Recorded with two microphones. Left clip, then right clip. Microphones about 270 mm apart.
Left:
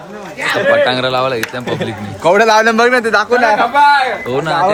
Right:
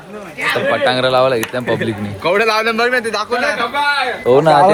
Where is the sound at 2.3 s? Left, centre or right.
Left.